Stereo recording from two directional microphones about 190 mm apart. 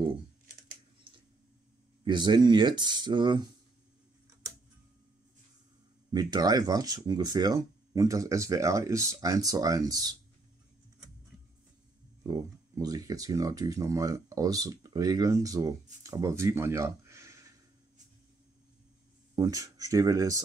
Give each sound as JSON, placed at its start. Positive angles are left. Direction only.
{"t": 2.0, "sound": "speech", "side_deg": -25}
{"t": 6.1, "sound": "speech", "side_deg": -20}
{"t": 12.2, "sound": "speech", "side_deg": -20}
{"t": 19.3, "sound": "speech", "side_deg": -15}